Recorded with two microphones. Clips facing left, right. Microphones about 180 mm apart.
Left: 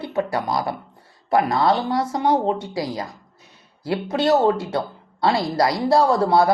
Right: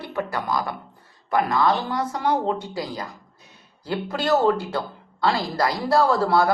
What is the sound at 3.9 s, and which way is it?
Speech, 20° left (ahead or behind).